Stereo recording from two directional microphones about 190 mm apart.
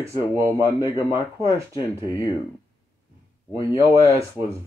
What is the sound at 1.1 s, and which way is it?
Speech, 25° left (ahead or behind).